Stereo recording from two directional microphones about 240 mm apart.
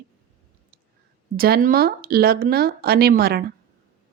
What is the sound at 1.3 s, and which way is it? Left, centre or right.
Speech, right.